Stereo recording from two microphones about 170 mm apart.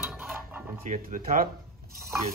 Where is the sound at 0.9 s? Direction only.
55° right (ahead or behind).